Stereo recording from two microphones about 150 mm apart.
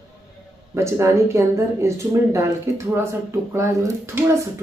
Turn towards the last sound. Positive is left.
turn(degrees=-15)  # may be behind; listen again after turning